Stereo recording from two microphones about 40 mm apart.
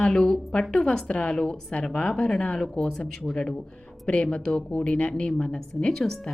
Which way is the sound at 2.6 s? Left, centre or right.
Centre.